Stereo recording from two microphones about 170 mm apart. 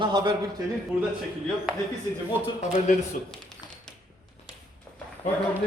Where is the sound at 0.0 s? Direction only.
25° right (ahead or behind).